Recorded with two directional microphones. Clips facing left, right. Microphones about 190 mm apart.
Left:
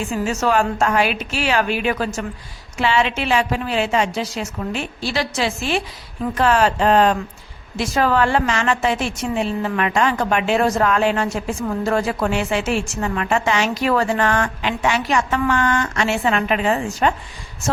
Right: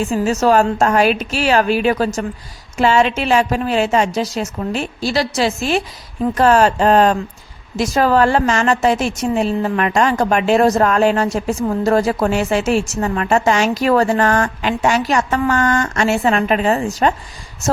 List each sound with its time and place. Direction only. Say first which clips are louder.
0.0 s a woman's voice: right 5 dB; 40° right (ahead or behind)